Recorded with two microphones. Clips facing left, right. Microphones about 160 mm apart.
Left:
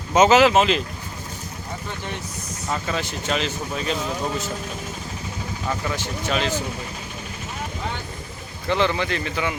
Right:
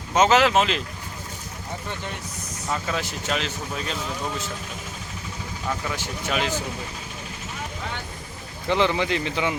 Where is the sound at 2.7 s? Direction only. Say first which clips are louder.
Left 1 dB; centre (ahead or behind).